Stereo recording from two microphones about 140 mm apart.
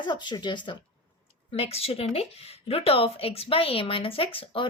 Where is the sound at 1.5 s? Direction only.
45° left (ahead or behind).